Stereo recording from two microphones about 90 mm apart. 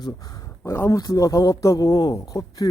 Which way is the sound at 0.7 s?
30° left (ahead or behind).